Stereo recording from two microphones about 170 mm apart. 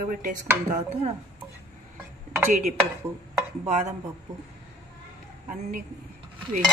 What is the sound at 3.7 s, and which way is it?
Speech, 40° right (ahead or behind).